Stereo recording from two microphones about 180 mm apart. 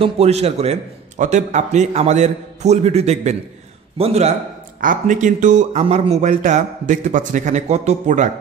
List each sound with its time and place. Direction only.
0.0 s a man's voice: 35° right (ahead or behind)